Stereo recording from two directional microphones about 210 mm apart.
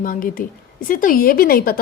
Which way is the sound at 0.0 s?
40° left (ahead or behind).